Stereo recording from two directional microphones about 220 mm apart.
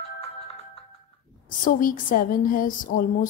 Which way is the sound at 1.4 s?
40° left (ahead or behind).